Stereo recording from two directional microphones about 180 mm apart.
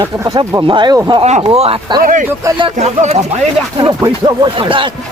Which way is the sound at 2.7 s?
40° right (ahead or behind).